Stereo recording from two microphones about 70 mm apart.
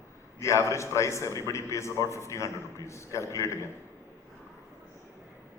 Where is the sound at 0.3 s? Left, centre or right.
Left.